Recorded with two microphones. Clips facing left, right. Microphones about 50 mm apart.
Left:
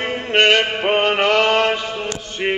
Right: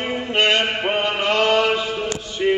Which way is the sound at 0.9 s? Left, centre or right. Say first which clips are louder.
Left 4 dB; left.